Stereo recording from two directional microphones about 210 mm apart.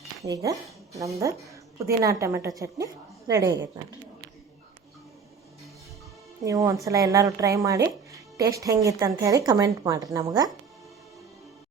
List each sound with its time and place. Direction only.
0.2 s speech: 15° right (ahead or behind)
6.4 s speech: 15° right (ahead or behind)